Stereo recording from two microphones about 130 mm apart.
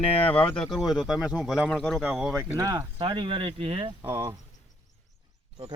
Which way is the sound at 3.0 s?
40° right (ahead or behind).